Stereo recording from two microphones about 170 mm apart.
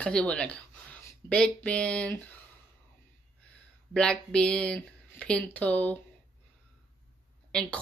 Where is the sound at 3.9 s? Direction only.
5° left (ahead or behind).